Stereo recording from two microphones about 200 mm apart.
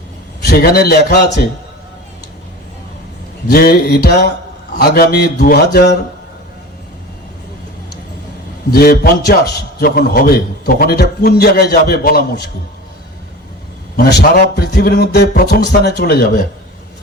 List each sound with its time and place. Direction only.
0.4 s a man's voice: 50° left (ahead or behind)
3.5 s a man's voice: 50° left (ahead or behind)
8.7 s a man's voice: 50° left (ahead or behind)
13.9 s a man's voice: 50° left (ahead or behind)